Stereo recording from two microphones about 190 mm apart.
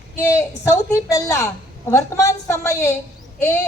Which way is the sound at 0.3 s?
15° left (ahead or behind).